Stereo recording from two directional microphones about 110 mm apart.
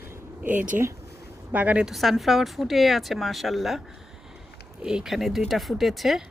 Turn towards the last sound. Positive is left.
turn(degrees=0)  # may be behind; listen again after turning